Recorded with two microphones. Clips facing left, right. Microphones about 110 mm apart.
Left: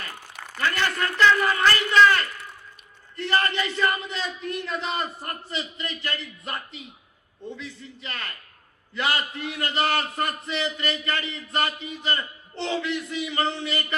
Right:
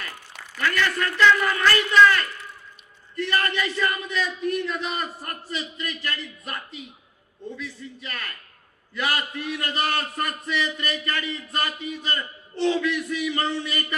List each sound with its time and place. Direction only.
0.5 s a man's voice: 30° left (ahead or behind)
7.6 s a man's voice: 30° left (ahead or behind)